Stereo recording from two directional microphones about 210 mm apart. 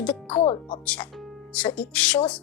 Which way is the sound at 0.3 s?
25° left (ahead or behind).